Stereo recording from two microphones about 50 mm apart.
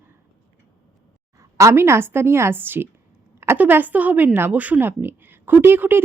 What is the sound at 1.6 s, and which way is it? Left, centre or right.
A woman's voice, right.